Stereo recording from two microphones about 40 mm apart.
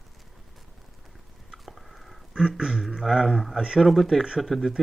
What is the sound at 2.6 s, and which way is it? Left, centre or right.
Speech, centre.